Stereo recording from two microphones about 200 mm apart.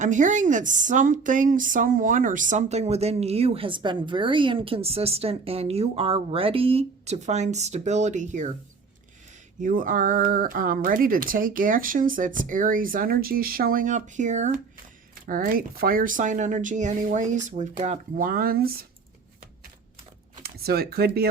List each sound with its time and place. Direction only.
0.0 s speech: 40° right (ahead or behind)
9.6 s speech: 40° right (ahead or behind)
20.4 s speech: 50° right (ahead or behind)